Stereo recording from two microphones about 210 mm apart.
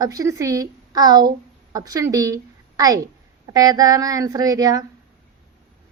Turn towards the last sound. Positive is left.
turn(degrees=-15)  # may be behind; listen again after turning